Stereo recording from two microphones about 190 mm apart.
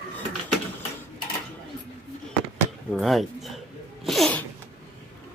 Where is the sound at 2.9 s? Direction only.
Centre (ahead or behind).